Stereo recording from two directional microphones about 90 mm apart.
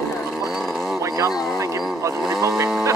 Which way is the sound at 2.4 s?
30° right (ahead or behind).